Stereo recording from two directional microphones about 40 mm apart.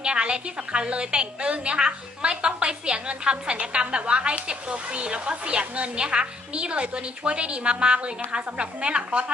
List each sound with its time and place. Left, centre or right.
0.0 s speech: right